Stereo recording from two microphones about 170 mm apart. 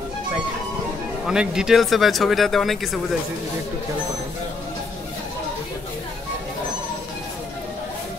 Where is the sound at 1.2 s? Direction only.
5° right (ahead or behind).